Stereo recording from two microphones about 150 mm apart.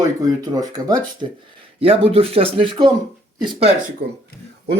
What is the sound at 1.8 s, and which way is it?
Speech, 40° right (ahead or behind).